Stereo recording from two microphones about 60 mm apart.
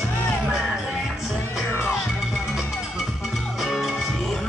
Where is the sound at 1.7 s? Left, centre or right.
Left.